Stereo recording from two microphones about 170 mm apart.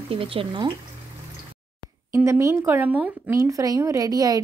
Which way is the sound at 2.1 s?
15° right (ahead or behind).